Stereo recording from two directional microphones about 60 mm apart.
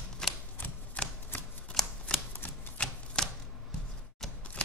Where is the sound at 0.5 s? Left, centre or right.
Left.